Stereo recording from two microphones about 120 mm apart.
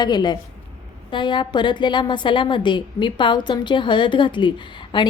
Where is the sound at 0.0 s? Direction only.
35° left (ahead or behind).